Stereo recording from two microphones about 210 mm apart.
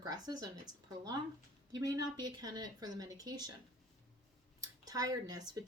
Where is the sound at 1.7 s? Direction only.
20° right (ahead or behind).